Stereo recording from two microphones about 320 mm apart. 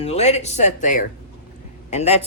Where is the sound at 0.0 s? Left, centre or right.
Centre.